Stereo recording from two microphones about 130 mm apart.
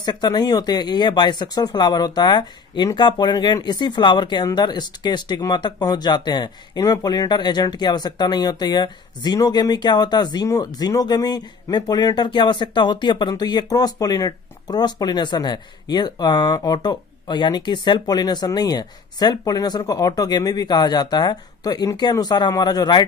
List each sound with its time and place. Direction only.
0.0 s speech: 35° left (ahead or behind)